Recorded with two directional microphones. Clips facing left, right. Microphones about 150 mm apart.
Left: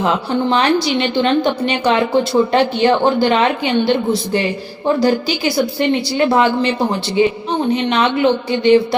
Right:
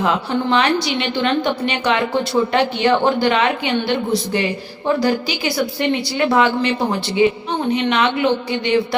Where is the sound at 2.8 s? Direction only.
30° left (ahead or behind).